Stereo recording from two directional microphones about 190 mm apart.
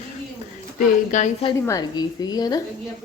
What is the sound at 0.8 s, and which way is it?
Speech, 40° left (ahead or behind).